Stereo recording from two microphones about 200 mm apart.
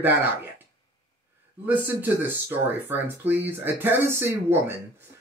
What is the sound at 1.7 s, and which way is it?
Speech, 10° right (ahead or behind).